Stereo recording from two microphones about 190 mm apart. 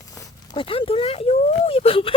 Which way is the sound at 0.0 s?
20° left (ahead or behind).